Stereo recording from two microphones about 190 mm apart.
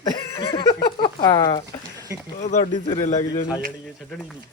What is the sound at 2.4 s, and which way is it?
A man's voice, 40° left (ahead or behind).